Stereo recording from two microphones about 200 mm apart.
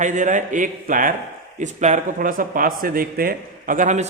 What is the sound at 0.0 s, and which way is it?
A man's voice, 40° right (ahead or behind).